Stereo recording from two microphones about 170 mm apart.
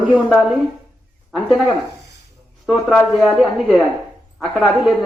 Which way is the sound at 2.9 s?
Centre (ahead or behind).